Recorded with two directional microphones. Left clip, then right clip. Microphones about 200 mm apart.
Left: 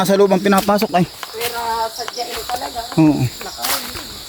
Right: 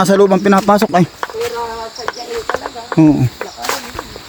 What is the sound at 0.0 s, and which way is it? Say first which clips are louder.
Speech: right 3 dB; 30° right (ahead or behind).